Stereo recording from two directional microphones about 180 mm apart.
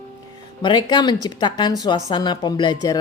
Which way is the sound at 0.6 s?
25° left (ahead or behind).